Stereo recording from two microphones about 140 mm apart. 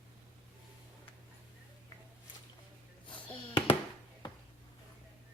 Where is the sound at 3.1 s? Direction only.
35° left (ahead or behind).